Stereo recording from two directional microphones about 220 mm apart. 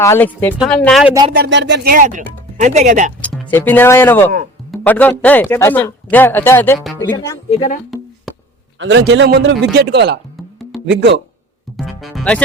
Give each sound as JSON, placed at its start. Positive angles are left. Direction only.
{"t": 0.0, "sound": "speech", "side_deg": 15}
{"t": 1.3, "sound": "speech", "side_deg": -50}
{"t": 3.2, "sound": "speech", "side_deg": 5}
{"t": 6.7, "sound": "speech", "side_deg": 0}
{"t": 7.2, "sound": "speech", "side_deg": 20}
{"t": 7.9, "sound": "music", "side_deg": 0}
{"t": 8.8, "sound": "a man's voice", "side_deg": -60}
{"t": 11.9, "sound": "speech", "side_deg": 0}